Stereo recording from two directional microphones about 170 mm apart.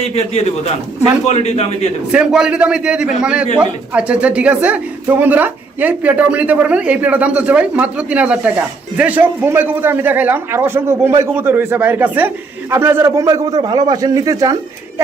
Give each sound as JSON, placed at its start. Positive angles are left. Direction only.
{"t": 0.2, "sound": "a man's voice", "side_deg": 40}
{"t": 2.1, "sound": "a man's voice", "side_deg": -5}